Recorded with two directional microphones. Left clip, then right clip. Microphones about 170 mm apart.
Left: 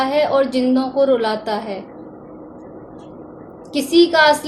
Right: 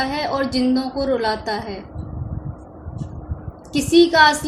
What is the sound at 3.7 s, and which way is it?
Speech, 25° right (ahead or behind).